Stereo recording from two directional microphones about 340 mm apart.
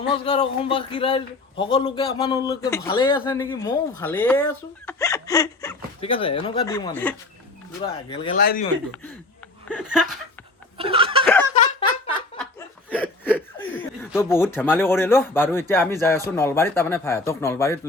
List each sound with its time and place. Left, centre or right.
0.1 s speech: centre
8.4 s speech: left
9.6 s speech: centre
10.8 s snicker: centre
12.1 s speech: centre